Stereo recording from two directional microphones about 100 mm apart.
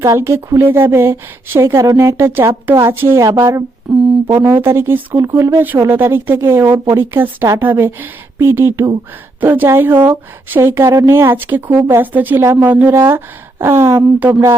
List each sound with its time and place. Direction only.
0.2 s speech: 30° right (ahead or behind)
3.9 s a sound: 5° right (ahead or behind)
4.3 s speech: 25° right (ahead or behind)